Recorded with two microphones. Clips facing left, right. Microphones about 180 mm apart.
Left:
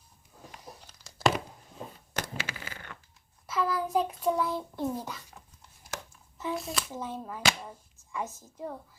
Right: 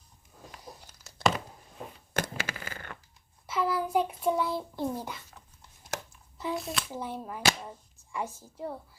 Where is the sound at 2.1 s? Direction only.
50° right (ahead or behind).